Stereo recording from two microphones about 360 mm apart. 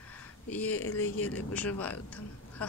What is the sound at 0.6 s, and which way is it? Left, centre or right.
Speech, left.